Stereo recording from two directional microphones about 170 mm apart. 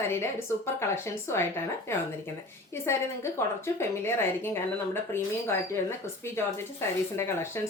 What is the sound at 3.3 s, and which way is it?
A woman's voice, 15° left (ahead or behind).